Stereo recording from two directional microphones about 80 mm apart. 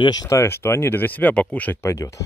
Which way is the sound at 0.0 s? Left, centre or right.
Left.